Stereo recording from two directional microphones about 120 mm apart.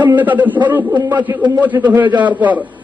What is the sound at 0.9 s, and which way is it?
Speech, 35° right (ahead or behind).